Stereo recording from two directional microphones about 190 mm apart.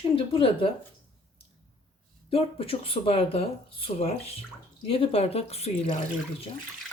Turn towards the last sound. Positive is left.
turn(degrees=35)  # may be behind; listen again after turning